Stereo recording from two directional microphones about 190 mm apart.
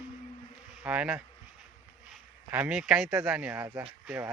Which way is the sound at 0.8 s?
5° right (ahead or behind).